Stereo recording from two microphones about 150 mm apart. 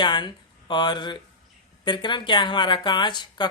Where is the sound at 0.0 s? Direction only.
30° left (ahead or behind).